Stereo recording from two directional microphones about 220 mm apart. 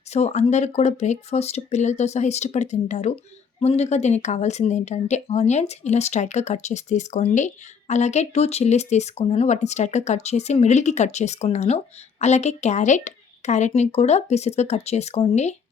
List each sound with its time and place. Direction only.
0.1 s speech: 30° left (ahead or behind)